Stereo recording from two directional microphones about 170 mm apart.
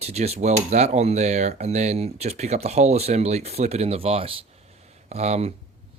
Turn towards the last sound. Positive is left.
turn(degrees=-40)  # may be behind; listen again after turning